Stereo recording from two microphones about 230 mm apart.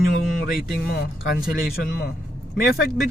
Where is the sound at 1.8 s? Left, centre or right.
Left.